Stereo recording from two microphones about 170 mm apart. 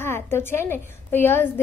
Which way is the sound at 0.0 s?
15° left (ahead or behind).